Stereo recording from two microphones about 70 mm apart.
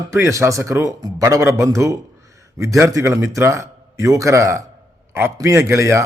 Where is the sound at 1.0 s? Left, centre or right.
Right.